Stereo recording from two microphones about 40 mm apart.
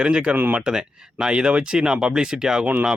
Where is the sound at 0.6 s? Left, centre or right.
Centre.